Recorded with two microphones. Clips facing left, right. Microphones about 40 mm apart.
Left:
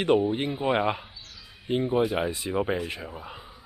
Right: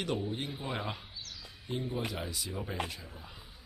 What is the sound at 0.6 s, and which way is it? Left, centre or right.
Bird, left.